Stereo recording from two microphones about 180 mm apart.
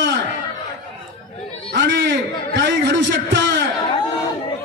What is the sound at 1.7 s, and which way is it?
A man's voice, 75° right (ahead or behind).